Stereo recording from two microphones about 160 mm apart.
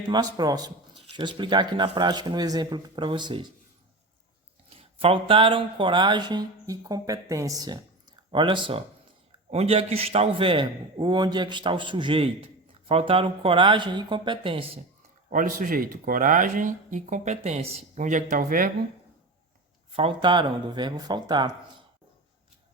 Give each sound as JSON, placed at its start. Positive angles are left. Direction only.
{"t": 0.1, "sound": "speech", "side_deg": -25}
{"t": 4.8, "sound": "a man's voice", "side_deg": -35}
{"t": 15.3, "sound": "speech", "side_deg": -55}
{"t": 19.9, "sound": "speech", "side_deg": -35}